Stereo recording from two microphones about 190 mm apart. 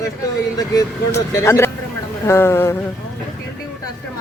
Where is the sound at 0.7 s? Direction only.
15° left (ahead or behind).